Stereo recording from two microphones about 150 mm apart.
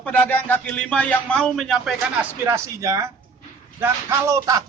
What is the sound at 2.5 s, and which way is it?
Speech, 20° right (ahead or behind).